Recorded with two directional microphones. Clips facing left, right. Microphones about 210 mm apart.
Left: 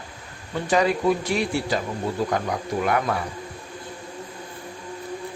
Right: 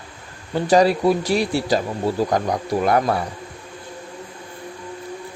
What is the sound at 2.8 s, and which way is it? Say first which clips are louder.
Speech: right 5 dB; 35° right (ahead or behind).